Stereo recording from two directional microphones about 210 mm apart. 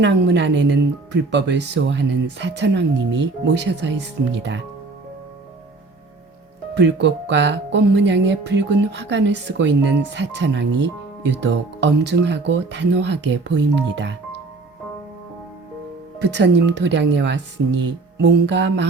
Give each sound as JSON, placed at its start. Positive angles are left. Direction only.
{"t": 0.0, "sound": "speech", "side_deg": -55}
{"t": 6.7, "sound": "speech", "side_deg": -60}
{"t": 16.1, "sound": "speech", "side_deg": -55}